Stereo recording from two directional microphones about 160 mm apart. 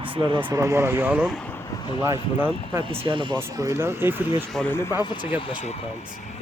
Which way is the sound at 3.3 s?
15° right (ahead or behind).